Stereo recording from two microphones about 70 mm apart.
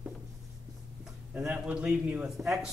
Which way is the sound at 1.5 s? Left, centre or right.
Centre.